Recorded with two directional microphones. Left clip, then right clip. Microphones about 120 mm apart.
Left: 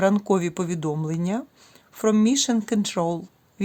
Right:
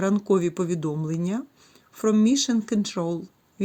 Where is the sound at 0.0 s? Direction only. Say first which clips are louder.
Left 2 dB; 35° left (ahead or behind).